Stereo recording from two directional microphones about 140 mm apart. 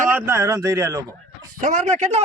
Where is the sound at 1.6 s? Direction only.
60° right (ahead or behind).